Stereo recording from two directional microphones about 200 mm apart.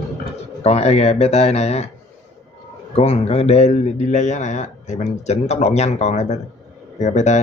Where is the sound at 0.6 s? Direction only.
30° left (ahead or behind).